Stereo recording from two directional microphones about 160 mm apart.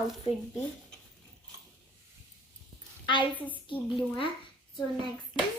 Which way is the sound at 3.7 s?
30° left (ahead or behind).